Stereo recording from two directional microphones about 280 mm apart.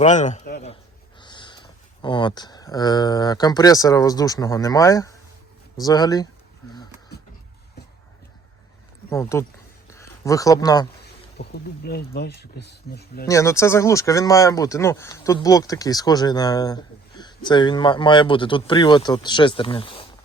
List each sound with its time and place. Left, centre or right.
0.0 s a man's voice: left
1.2 s speech: centre
9.0 s speech: centre
11.3 s speech: left
13.2 s speech: centre